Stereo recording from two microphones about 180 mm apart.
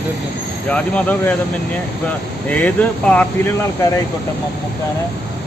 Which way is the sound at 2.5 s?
10° left (ahead or behind).